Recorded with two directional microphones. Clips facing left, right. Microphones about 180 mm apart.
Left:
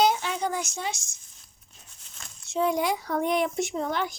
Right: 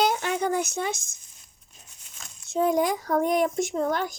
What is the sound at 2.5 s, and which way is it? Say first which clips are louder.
Speech: right 2 dB; 45° right (ahead or behind).